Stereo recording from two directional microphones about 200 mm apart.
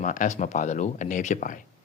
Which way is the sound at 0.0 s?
40° left (ahead or behind).